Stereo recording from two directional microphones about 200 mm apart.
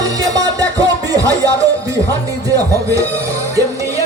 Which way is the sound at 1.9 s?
15° right (ahead or behind).